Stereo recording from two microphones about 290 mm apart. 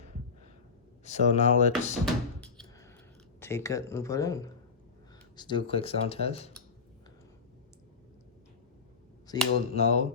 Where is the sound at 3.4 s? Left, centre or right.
Centre.